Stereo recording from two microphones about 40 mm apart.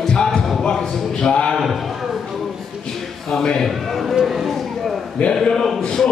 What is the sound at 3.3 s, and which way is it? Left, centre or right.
Speech, centre.